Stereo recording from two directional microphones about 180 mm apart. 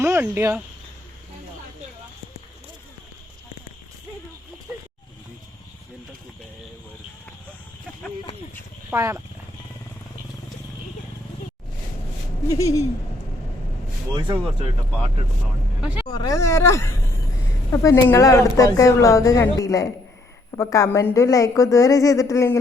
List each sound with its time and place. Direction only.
0.0 s speech: 15° right (ahead or behind)
8.9 s speech: 15° right (ahead or behind)
12.5 s speech: 15° left (ahead or behind)
15.8 s speech: 5° right (ahead or behind)
16.0 s speech: 20° left (ahead or behind)